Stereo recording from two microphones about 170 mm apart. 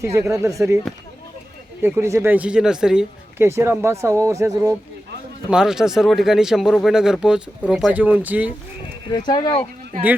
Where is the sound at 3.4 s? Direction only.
15° right (ahead or behind).